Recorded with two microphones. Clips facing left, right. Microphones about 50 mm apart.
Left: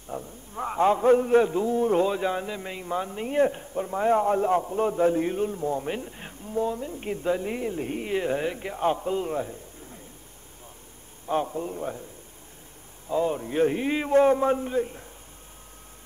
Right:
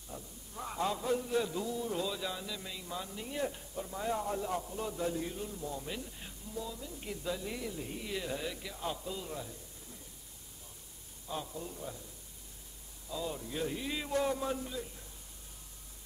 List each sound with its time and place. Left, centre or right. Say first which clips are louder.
0.1 s a man's voice: left 11 dB; left
11.2 s a man's voice: left 13 dB; left
13.1 s a man's voice: left 13 dB; left